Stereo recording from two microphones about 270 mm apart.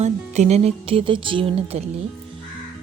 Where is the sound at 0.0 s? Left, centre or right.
Right.